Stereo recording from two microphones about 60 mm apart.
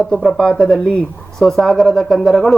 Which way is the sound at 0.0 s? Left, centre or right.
Centre.